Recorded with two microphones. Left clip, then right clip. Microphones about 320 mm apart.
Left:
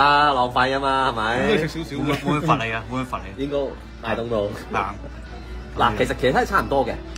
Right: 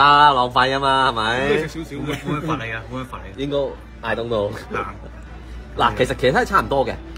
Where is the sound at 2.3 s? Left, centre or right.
Centre.